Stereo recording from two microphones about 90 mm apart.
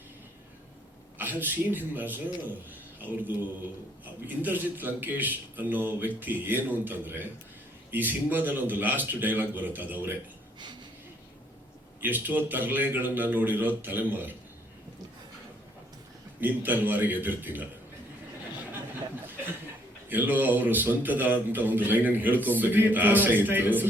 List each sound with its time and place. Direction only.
1.2 s speech: 20° right (ahead or behind)
11.9 s speech: 20° right (ahead or behind)
16.4 s speech: 20° right (ahead or behind)
20.1 s speech: 20° right (ahead or behind)